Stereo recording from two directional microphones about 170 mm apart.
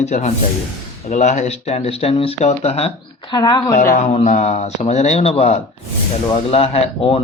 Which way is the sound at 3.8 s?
50° left (ahead or behind).